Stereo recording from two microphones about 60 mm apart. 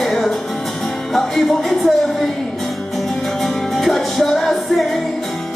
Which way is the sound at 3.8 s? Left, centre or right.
Centre.